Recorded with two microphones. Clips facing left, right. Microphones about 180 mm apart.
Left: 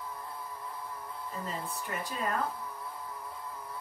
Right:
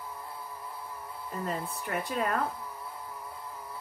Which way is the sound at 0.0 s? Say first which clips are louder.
Even; 5° right (ahead or behind).